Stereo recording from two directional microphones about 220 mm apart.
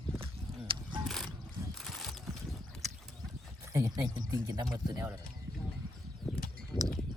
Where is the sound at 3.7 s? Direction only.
15° right (ahead or behind).